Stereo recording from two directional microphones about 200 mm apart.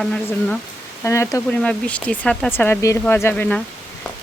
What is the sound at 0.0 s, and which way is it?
Speech, 5° left (ahead or behind).